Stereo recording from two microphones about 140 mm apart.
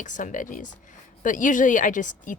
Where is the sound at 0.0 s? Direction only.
65° left (ahead or behind).